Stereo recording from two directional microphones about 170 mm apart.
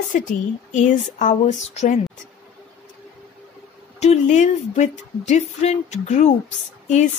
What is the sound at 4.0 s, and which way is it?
Speech, 40° left (ahead or behind).